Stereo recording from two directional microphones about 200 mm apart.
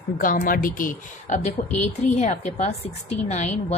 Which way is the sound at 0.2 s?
45° left (ahead or behind).